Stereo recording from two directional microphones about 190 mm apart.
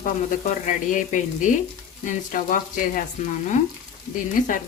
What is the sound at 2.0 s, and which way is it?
Speech, 45° left (ahead or behind).